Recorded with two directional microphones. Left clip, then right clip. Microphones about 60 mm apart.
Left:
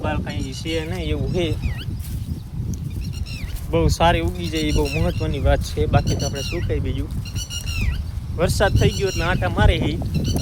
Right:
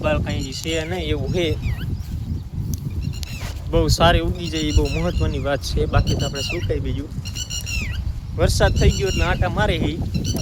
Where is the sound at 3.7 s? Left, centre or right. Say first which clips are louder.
Right 1 dB; right.